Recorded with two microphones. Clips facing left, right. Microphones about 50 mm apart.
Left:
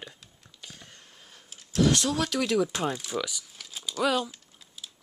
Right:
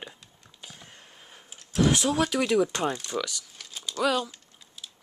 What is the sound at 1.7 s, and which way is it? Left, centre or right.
Speech, centre.